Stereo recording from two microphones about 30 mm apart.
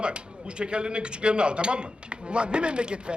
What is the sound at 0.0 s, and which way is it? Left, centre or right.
A man's voice, right.